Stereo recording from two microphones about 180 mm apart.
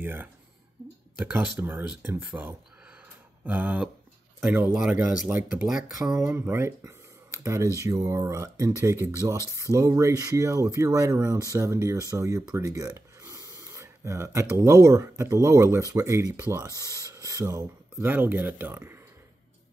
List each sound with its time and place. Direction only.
0.0 s speech: 10° right (ahead or behind)
6.2 s speech: 15° right (ahead or behind)